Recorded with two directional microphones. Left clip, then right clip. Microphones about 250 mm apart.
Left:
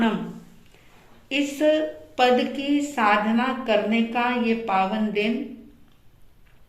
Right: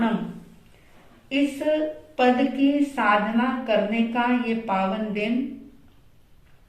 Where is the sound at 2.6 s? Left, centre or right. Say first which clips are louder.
Even; left.